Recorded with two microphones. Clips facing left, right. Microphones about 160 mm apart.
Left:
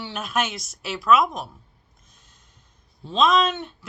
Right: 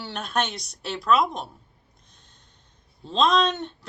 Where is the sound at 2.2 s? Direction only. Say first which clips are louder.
Right 1 dB; 5° left (ahead or behind).